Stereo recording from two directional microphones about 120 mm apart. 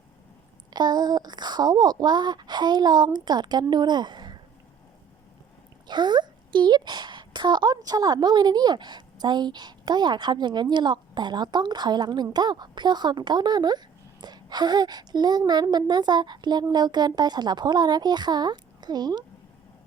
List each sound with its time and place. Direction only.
0.7 s speech: 35° right (ahead or behind)
5.9 s a woman's voice: 40° right (ahead or behind)